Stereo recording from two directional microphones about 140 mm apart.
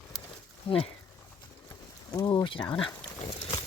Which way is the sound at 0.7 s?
40° left (ahead or behind).